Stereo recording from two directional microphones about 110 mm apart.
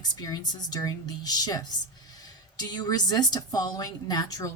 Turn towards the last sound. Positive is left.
turn(degrees=35)  # may be behind; listen again after turning